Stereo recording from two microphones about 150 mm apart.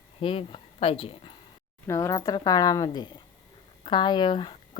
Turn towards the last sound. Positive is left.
turn(degrees=30)  # may be behind; listen again after turning